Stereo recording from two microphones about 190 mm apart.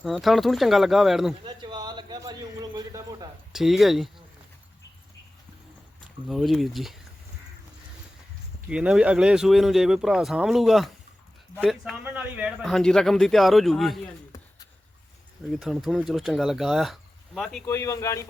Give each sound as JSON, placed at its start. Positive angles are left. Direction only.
{"t": 0.0, "sound": "speech", "side_deg": 0}
{"t": 1.5, "sound": "a sound", "side_deg": -25}
{"t": 3.5, "sound": "speech", "side_deg": 0}
{"t": 6.2, "sound": "speech", "side_deg": 0}
{"t": 8.7, "sound": "speech", "side_deg": -5}
{"t": 15.5, "sound": "speech", "side_deg": 0}
{"t": 17.7, "sound": "a man's voice", "side_deg": 15}